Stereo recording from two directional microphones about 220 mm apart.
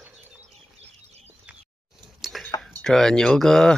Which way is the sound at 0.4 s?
30° right (ahead or behind).